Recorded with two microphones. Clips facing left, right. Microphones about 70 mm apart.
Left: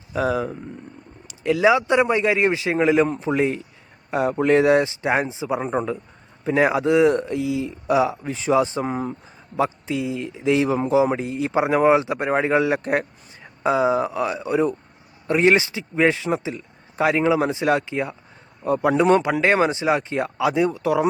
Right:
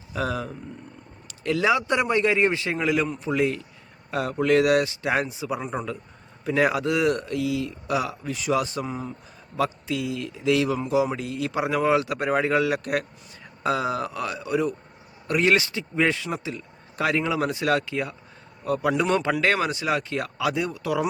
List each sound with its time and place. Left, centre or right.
0.1 s speech: centre
2.7 s speech: left
8.9 s speech: left
9.6 s speech: left